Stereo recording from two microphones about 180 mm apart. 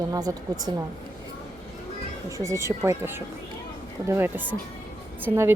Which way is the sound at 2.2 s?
15° right (ahead or behind).